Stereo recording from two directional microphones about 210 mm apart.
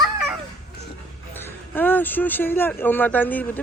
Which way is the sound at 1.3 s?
10° left (ahead or behind).